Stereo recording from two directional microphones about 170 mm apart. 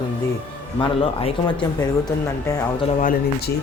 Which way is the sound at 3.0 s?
55° left (ahead or behind).